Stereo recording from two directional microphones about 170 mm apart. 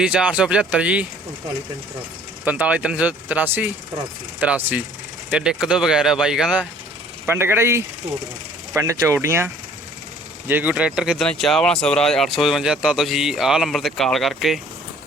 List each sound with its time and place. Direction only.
0.0 s speech: 5° right (ahead or behind)
2.4 s speech: 10° right (ahead or behind)